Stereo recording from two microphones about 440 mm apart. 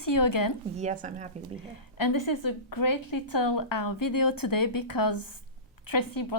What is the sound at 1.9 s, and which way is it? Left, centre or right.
A woman's voice, left.